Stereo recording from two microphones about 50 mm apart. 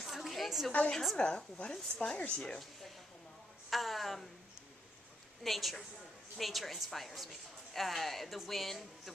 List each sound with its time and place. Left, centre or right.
0.0 s a sound: centre
0.7 s speech: left
3.7 s a woman's voice: centre
5.4 s a woman's voice: centre